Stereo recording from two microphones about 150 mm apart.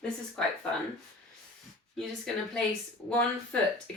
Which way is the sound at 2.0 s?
5° left (ahead or behind).